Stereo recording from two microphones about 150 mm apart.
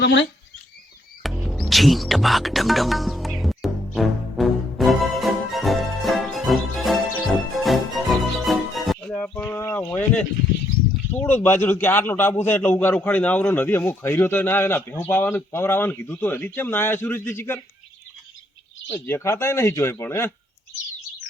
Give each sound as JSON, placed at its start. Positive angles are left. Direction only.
{"t": 1.2, "sound": "music", "side_deg": 0}
{"t": 11.2, "sound": "a man's voice", "side_deg": 15}
{"t": 18.9, "sound": "a man's voice", "side_deg": 15}